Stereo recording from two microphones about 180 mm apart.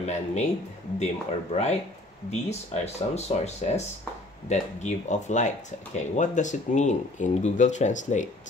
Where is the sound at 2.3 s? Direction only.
40° left (ahead or behind).